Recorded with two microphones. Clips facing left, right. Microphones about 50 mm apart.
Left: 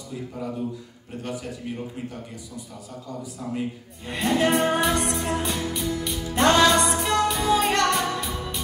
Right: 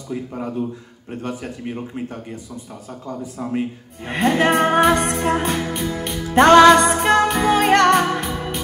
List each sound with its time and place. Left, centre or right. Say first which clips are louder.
0.1 s a man's voice: right 6 dB; right
4.3 s music: right 4 dB; right